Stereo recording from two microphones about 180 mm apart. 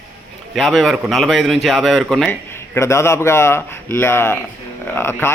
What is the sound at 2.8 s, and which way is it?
A man's voice, 15° left (ahead or behind).